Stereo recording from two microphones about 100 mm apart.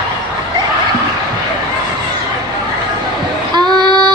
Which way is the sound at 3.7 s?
45° right (ahead or behind).